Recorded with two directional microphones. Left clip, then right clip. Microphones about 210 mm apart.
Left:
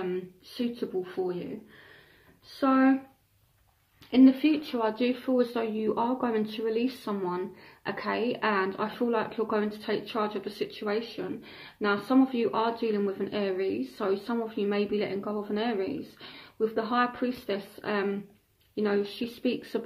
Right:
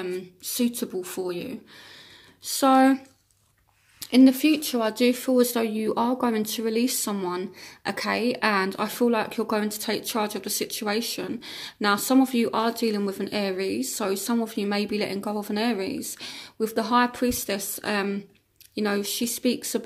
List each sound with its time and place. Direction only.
0.6 s speech: 45° right (ahead or behind)
2.6 s speech: 45° right (ahead or behind)
4.1 s speech: 40° right (ahead or behind)